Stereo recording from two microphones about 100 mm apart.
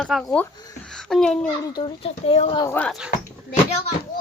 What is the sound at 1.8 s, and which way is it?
Speech, 75° left (ahead or behind).